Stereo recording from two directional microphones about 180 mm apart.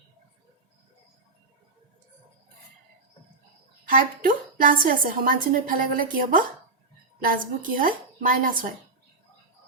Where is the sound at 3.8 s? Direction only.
50° right (ahead or behind).